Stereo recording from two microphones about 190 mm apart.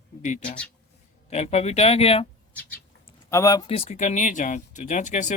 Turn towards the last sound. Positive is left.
turn(degrees=40)  # may be behind; listen again after turning